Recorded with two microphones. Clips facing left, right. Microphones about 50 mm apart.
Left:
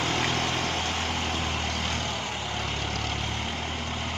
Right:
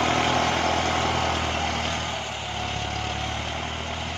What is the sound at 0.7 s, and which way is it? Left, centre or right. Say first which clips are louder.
Vehicle: right 6 dB; right.